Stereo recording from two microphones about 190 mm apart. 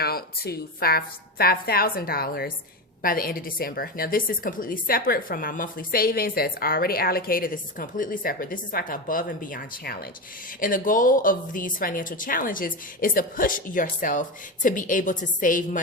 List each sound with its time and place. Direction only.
0.0 s a woman's voice: 55° left (ahead or behind)